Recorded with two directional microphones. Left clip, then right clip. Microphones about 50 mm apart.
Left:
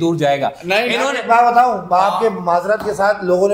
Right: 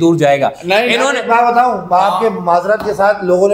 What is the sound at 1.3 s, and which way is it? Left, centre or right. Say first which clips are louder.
Speech: even; left.